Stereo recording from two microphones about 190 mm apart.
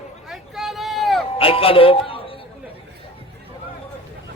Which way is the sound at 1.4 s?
30° left (ahead or behind).